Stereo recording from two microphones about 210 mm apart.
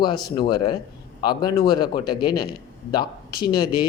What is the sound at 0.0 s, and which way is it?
Speech, 20° left (ahead or behind).